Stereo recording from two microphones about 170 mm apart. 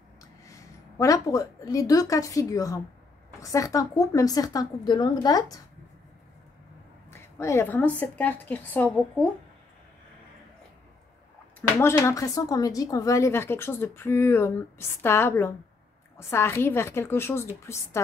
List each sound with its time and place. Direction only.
0.5 s a woman's voice: 20° left (ahead or behind)
7.1 s a sound: 15° left (ahead or behind)
8.0 s speech: 10° left (ahead or behind)
11.8 s speech: 20° left (ahead or behind)